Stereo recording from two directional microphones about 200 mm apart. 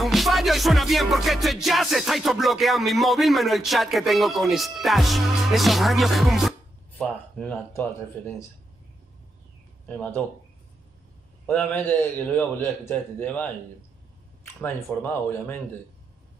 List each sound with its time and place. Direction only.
0.0 s music: centre (ahead or behind)
9.8 s a man's voice: 5° left (ahead or behind)
11.4 s a man's voice: 10° left (ahead or behind)